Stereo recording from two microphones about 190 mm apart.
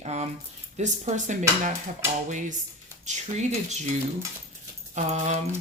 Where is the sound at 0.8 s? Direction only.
40° right (ahead or behind).